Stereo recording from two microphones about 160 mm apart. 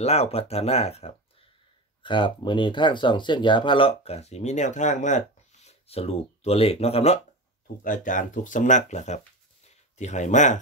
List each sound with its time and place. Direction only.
0.0 s speech: 40° left (ahead or behind)
7.8 s speech: 55° left (ahead or behind)